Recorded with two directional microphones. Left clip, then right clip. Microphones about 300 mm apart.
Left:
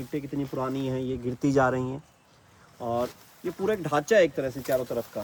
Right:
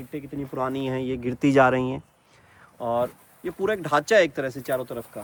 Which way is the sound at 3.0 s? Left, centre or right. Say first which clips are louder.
Right 4 dB; centre.